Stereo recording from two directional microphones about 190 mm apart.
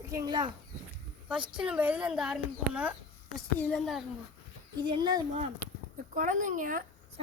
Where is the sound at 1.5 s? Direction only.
5° right (ahead or behind).